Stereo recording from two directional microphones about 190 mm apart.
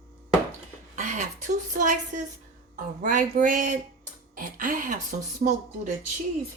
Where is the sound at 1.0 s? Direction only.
40° right (ahead or behind).